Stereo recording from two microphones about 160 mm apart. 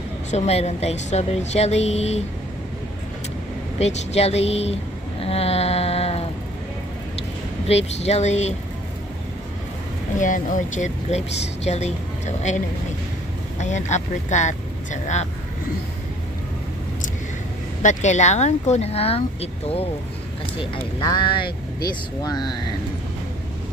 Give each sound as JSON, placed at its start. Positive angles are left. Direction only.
{"t": 0.3, "sound": "speech", "side_deg": 40}
{"t": 3.8, "sound": "speech", "side_deg": 40}
{"t": 5.2, "sound": "a sound", "side_deg": 40}
{"t": 7.6, "sound": "speech", "side_deg": 40}
{"t": 10.1, "sound": "speech", "side_deg": 55}
{"t": 17.8, "sound": "speech", "side_deg": 45}